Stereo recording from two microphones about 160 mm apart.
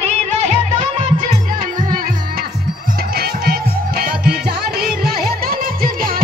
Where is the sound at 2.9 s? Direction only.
75° right (ahead or behind).